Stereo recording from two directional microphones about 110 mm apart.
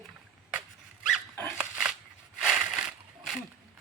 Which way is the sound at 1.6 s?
10° right (ahead or behind).